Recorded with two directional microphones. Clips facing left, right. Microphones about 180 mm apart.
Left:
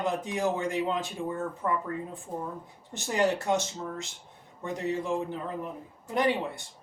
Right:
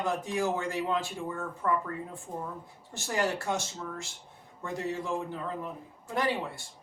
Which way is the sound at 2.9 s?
20° left (ahead or behind).